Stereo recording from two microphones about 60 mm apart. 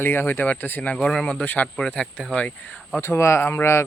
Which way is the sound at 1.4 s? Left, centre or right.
Left.